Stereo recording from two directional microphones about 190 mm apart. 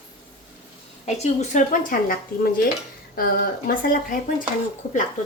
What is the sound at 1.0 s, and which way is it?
A woman's voice, 40° left (ahead or behind).